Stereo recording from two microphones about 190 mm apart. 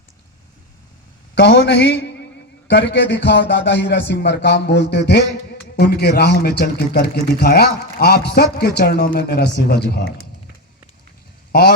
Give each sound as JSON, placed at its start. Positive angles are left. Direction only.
{"t": 1.4, "sound": "speech", "side_deg": 70}